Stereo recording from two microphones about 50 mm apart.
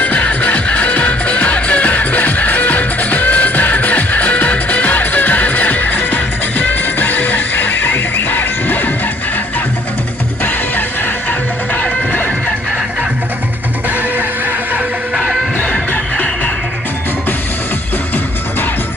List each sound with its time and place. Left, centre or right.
0.0 s music: left
11.7 s music: left